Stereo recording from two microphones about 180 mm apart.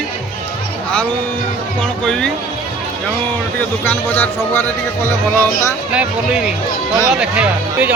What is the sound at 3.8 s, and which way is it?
Speech, 10° left (ahead or behind).